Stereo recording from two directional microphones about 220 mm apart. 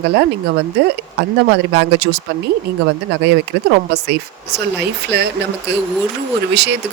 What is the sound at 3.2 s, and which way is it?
Speech, 50° right (ahead or behind).